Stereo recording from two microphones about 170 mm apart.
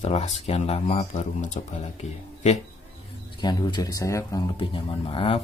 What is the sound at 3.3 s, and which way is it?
Speech, 25° left (ahead or behind).